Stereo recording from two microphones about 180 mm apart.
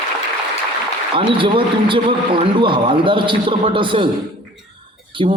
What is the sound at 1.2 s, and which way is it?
A man's voice, 30° right (ahead or behind).